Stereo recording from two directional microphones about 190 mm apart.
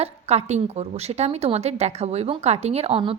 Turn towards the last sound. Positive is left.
turn(degrees=-30)  # may be behind; listen again after turning